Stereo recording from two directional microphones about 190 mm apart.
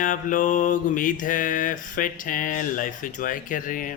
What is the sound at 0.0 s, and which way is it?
Speech, 45° left (ahead or behind).